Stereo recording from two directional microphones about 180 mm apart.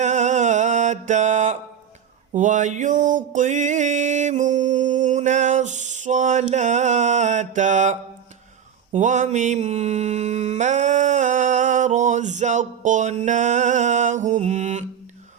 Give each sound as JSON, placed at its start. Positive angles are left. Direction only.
{"t": 0.0, "sound": "mantra", "side_deg": -40}
{"t": 2.3, "sound": "a sound", "side_deg": -45}
{"t": 8.9, "sound": "mantra", "side_deg": -45}